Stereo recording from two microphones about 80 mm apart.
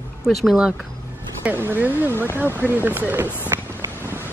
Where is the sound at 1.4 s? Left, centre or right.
Right.